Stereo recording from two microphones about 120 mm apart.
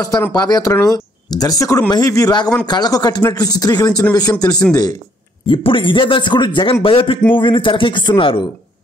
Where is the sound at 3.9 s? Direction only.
10° left (ahead or behind).